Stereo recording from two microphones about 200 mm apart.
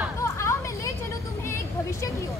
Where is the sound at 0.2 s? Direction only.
15° left (ahead or behind).